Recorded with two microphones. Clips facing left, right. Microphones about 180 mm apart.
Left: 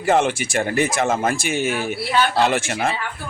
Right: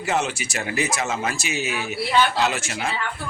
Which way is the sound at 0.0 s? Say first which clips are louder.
Left 6 dB; 55° left (ahead or behind).